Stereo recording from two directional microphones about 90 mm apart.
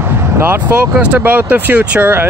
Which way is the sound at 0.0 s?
25° right (ahead or behind).